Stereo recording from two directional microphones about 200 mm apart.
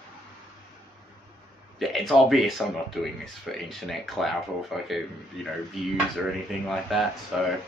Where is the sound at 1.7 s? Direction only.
Centre (ahead or behind).